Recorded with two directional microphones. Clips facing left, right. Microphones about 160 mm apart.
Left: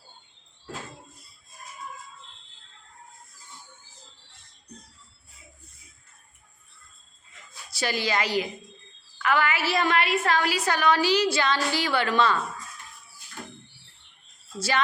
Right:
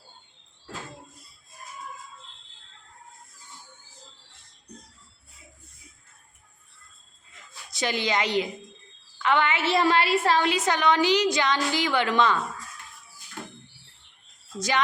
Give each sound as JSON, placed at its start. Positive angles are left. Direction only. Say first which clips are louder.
{"t": 7.7, "sound": "a woman's voice", "louder": "right 1 dB", "side_deg": -20}